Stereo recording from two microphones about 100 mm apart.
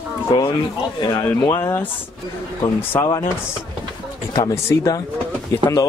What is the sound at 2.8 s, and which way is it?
Speech, 20° left (ahead or behind).